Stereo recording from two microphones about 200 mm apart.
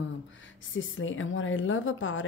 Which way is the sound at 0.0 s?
70° left (ahead or behind).